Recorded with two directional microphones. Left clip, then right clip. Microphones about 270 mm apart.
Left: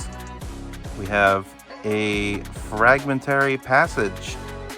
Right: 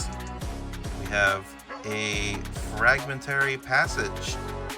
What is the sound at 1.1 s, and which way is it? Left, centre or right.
Speech, centre.